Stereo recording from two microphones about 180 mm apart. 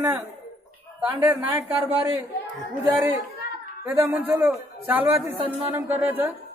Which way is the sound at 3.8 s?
10° right (ahead or behind).